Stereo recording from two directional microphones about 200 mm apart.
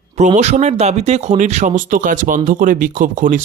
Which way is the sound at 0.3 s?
35° right (ahead or behind).